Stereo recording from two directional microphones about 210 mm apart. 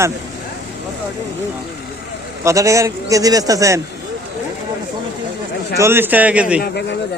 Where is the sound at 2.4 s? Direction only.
15° right (ahead or behind).